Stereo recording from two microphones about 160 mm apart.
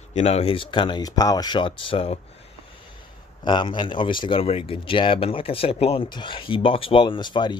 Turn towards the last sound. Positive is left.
turn(degrees=30)  # may be behind; listen again after turning